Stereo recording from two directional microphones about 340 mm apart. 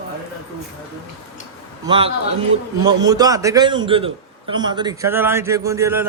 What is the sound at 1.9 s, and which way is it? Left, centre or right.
A man's voice, centre.